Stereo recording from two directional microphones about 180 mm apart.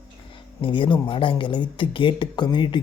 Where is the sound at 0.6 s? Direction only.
30° left (ahead or behind).